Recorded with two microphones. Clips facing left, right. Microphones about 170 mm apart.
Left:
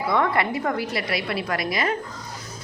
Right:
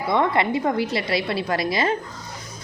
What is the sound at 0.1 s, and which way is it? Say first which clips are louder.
A woman's voice: right 3 dB; 20° right (ahead or behind).